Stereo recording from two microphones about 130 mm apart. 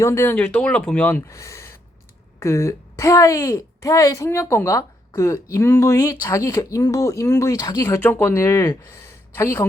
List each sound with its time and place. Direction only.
0.0 s speech: 20° left (ahead or behind)